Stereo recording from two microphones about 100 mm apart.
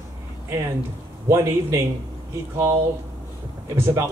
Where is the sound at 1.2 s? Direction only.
30° right (ahead or behind).